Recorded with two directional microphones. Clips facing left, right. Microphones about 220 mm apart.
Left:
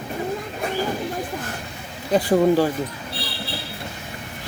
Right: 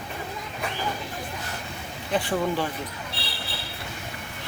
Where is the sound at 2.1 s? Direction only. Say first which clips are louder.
Left 9 dB; 40° left (ahead or behind).